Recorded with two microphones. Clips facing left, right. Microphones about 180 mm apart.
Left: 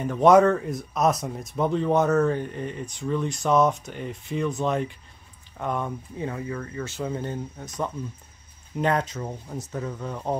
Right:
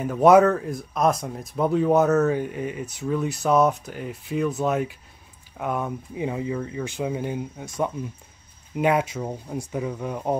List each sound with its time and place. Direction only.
0.0 s speech: 5° right (ahead or behind)